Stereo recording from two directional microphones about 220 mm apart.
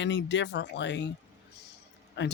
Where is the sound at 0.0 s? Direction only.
55° left (ahead or behind).